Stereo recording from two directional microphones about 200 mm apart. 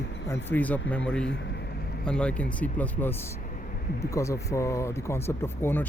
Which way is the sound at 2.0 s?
5° left (ahead or behind).